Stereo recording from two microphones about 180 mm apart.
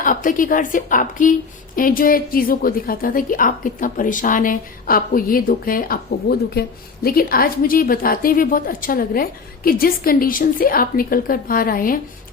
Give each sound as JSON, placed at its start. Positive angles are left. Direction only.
{"t": 0.0, "sound": "a woman's voice", "side_deg": 50}